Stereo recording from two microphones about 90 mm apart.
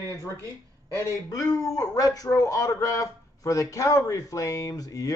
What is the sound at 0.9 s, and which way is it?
Speech, 35° right (ahead or behind).